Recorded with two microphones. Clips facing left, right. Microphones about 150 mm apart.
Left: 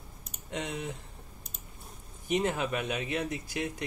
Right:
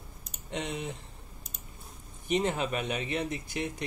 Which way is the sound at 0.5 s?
Centre (ahead or behind).